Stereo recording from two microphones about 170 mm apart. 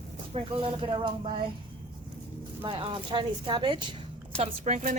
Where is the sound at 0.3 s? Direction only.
30° right (ahead or behind).